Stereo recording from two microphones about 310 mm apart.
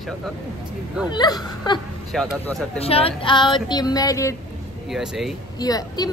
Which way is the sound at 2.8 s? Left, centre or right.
Centre.